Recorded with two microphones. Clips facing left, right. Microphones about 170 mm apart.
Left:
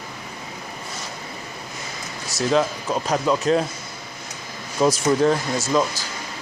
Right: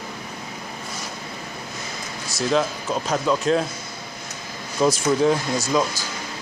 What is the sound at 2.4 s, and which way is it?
Speech, centre (ahead or behind).